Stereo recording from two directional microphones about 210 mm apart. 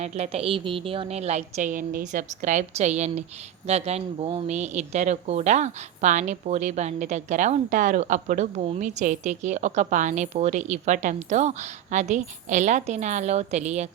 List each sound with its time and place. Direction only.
0.0 s speech: 30° right (ahead or behind)